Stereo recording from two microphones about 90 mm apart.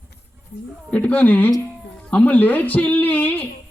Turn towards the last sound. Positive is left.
turn(degrees=15)  # may be behind; listen again after turning